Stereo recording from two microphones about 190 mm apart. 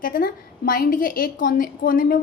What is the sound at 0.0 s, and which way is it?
A woman's voice, 50° left (ahead or behind).